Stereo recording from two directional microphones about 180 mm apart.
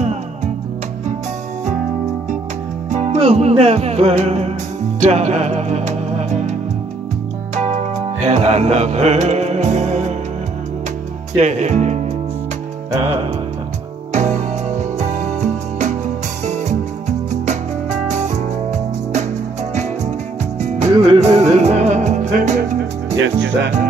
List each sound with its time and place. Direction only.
2.9 s music: 40° right (ahead or behind)
7.5 s music: 40° right (ahead or behind)
11.3 s speech: 40° right (ahead or behind)
14.1 s music: 40° right (ahead or behind)
20.6 s music: 40° right (ahead or behind)
23.2 s speech: 90° right